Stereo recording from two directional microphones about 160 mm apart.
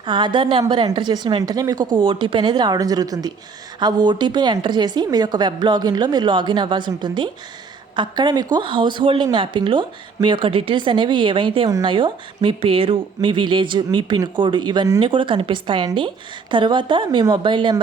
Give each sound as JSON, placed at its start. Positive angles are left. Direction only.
{"t": 0.0, "sound": "a woman's voice", "side_deg": -30}